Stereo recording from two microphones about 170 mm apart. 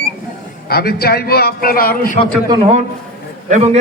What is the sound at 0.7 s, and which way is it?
A man's voice, 65° left (ahead or behind).